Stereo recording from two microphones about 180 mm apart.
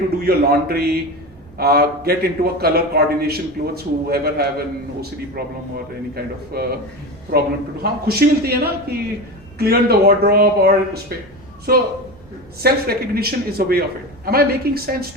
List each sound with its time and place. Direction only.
0.3 s a man's voice: 60° right (ahead or behind)